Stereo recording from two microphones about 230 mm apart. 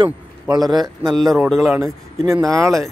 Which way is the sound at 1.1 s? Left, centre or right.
Centre.